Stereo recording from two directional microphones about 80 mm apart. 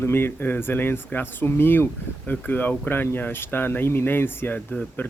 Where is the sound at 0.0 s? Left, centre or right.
Left.